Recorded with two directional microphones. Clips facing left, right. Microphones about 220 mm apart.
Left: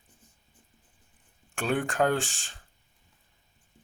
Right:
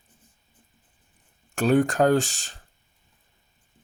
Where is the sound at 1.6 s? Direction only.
40° right (ahead or behind).